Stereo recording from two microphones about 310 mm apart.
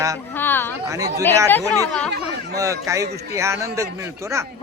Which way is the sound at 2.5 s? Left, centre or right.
Centre.